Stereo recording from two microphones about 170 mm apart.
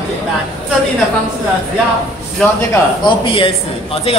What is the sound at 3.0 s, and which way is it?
Speech, 30° left (ahead or behind).